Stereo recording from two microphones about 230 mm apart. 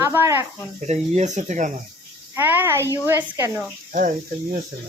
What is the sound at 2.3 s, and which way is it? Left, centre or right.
Speech, centre.